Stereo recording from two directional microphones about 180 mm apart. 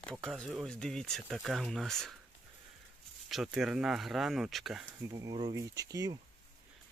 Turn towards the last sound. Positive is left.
turn(degrees=-20)  # may be behind; listen again after turning